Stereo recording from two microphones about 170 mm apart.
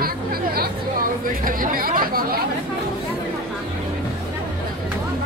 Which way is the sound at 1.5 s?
55° right (ahead or behind).